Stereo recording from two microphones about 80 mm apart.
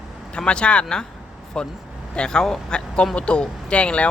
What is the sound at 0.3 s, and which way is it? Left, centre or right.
Speech, centre.